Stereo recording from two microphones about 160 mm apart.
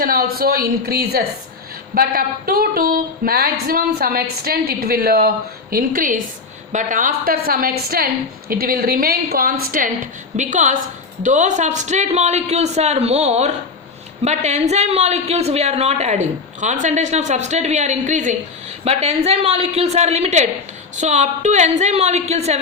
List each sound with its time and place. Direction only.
0.0 s a woman's voice: 65° right (ahead or behind); by 22.6 s 40° right (ahead or behind)